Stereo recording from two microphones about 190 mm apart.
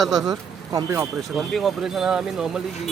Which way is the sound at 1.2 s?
Centre (ahead or behind).